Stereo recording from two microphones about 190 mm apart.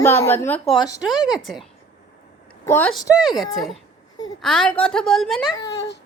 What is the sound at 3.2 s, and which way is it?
A woman's voice, centre (ahead or behind).